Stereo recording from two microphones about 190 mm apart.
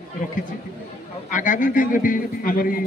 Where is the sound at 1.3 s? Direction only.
40° left (ahead or behind).